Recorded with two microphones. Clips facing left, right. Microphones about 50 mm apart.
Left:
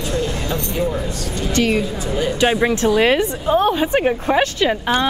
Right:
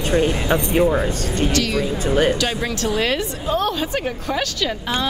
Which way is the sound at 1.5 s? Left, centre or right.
Left.